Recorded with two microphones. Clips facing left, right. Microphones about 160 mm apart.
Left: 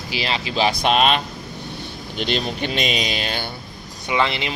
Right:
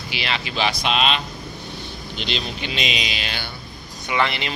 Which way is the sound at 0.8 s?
50° left (ahead or behind).